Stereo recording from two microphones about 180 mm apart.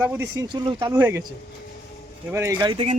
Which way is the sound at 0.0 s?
15° right (ahead or behind).